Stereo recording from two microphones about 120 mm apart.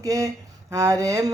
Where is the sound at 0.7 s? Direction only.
25° right (ahead or behind).